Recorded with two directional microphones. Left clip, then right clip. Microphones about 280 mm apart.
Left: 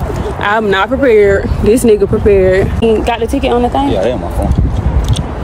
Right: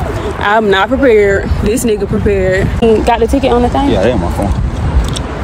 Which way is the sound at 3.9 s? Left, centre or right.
Right.